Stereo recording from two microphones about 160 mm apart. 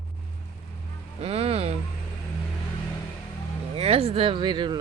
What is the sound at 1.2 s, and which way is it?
Cattle, 40° right (ahead or behind).